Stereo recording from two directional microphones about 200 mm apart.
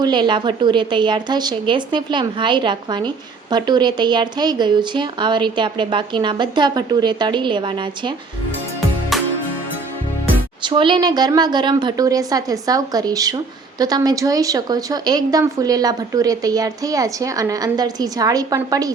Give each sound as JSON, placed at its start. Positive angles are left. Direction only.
{"t": 0.0, "sound": "speech", "side_deg": -20}
{"t": 10.6, "sound": "speech", "side_deg": -25}